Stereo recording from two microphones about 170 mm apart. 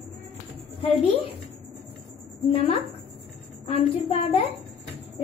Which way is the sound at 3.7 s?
35° left (ahead or behind).